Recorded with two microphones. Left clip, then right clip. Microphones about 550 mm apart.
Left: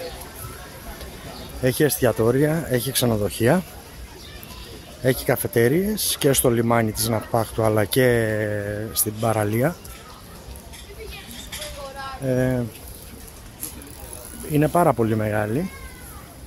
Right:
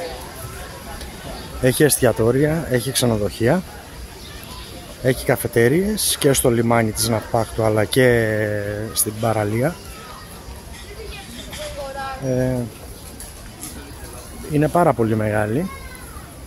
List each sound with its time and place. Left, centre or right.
1.6 s speech: left
5.0 s speech: left
12.3 s speech: left
14.5 s speech: left